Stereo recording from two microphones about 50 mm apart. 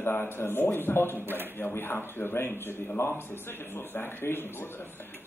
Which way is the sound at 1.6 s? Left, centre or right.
Left.